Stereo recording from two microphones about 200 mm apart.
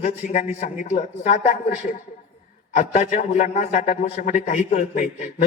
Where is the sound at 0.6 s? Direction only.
40° left (ahead or behind).